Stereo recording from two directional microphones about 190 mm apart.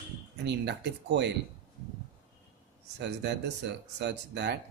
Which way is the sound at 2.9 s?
65° right (ahead or behind).